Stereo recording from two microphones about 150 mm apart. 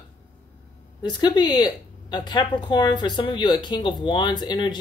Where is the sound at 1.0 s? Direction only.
30° left (ahead or behind).